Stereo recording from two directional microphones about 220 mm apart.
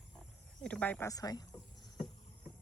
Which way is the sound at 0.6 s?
5° left (ahead or behind).